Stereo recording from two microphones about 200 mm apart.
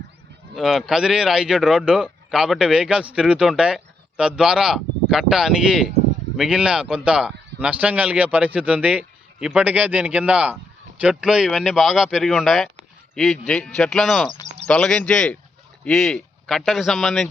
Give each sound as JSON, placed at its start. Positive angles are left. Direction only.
{"t": 0.5, "sound": "a man's voice", "side_deg": 0}
{"t": 14.4, "sound": "a sound", "side_deg": -35}
{"t": 14.7, "sound": "a man's voice", "side_deg": 5}